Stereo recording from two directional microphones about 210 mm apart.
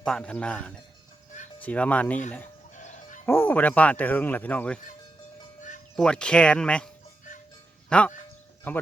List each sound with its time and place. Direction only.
0.0 s speech: 5° left (ahead or behind)
2.7 s music: 35° left (ahead or behind)
3.2 s speech: 10° left (ahead or behind)
6.0 s speech: 5° left (ahead or behind)